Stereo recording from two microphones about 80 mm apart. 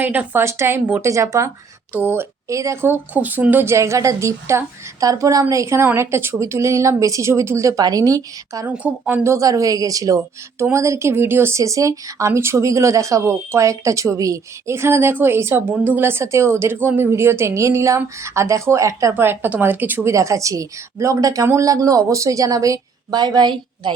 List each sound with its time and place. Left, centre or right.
0.0 s speech: right
0.4 s speech: right
1.9 s speech: right
2.5 s speech: right
2.8 s speech: right
8.6 s a woman's voice: centre
9.2 s a woman's voice: right
10.6 s speech: right
11.5 s speech: right
19.1 s speech: right
20.1 s a woman's voice: right
23.1 s a woman's voice: right